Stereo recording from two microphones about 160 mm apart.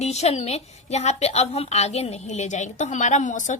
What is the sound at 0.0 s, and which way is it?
A woman's voice, 40° left (ahead or behind).